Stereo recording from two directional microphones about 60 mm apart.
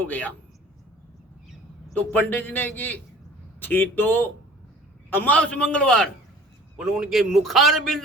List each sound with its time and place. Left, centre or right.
0.0 s speech: left
2.0 s a man's voice: left
5.4 s a man's voice: centre
6.7 s a man's voice: centre